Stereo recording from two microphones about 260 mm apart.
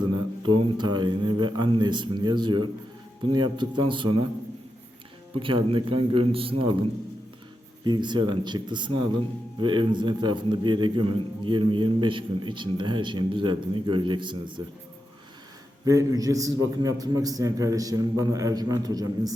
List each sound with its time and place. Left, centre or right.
0.5 s a man's voice: centre
5.3 s speech: centre
7.9 s a man's voice: centre
15.8 s a man's voice: centre